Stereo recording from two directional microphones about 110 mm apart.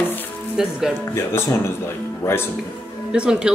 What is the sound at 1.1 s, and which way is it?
Speech, 25° left (ahead or behind).